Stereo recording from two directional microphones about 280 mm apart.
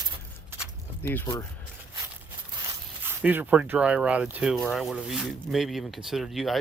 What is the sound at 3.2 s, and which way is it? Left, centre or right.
Speech, centre.